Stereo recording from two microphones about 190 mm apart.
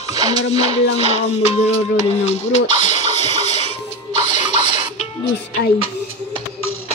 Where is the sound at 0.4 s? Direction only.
35° left (ahead or behind).